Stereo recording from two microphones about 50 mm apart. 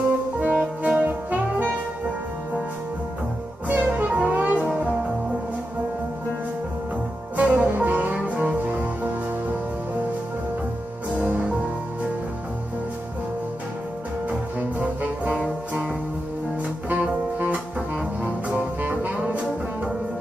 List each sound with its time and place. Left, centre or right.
0.4 s music: right
1.0 s music: right
3.6 s music: right
7.3 s music: right
11.1 s music: right
14.8 s brass instrument: right
16.9 s music: right